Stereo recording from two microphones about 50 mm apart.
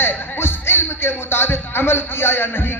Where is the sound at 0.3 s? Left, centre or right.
Left.